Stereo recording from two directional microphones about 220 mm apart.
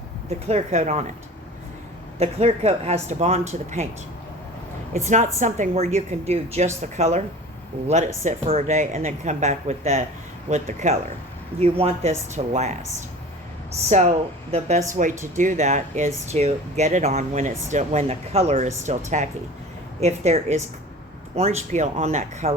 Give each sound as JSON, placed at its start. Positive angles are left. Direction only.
{"t": 0.3, "sound": "speech", "side_deg": -30}
{"t": 2.1, "sound": "speech", "side_deg": -30}
{"t": 4.9, "sound": "speech", "side_deg": -35}
{"t": 13.9, "sound": "speech", "side_deg": -30}